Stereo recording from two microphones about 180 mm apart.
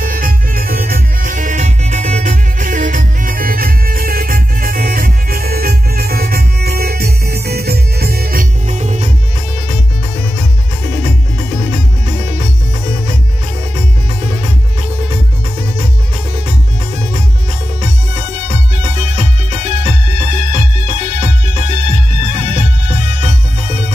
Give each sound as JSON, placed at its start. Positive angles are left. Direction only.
{"t": 0.0, "sound": "music", "side_deg": -50}
{"t": 18.8, "sound": "music", "side_deg": -35}